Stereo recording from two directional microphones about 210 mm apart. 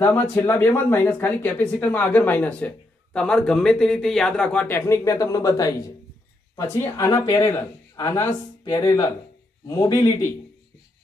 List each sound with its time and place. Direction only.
0.0 s speech: 10° left (ahead or behind)